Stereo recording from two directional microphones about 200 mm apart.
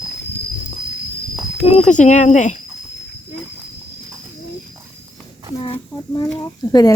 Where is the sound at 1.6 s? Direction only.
35° left (ahead or behind).